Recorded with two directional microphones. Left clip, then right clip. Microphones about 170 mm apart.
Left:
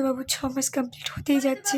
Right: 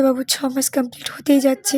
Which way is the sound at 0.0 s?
35° right (ahead or behind).